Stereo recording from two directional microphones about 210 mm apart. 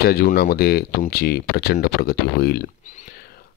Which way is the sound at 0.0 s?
45° left (ahead or behind).